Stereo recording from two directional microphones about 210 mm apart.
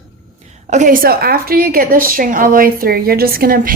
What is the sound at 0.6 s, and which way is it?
A woman's voice, 35° right (ahead or behind).